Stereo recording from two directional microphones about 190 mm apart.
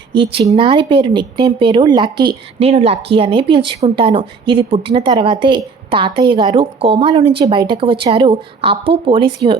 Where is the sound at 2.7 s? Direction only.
35° right (ahead or behind).